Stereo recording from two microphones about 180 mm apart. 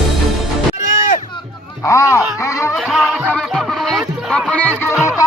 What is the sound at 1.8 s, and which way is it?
Music, 15° left (ahead or behind).